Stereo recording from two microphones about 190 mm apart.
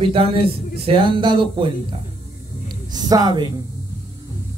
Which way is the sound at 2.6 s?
20° right (ahead or behind).